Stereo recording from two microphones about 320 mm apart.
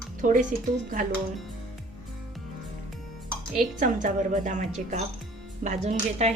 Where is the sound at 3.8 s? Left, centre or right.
Right.